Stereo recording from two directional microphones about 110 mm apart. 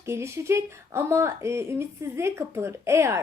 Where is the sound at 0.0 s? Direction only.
25° right (ahead or behind).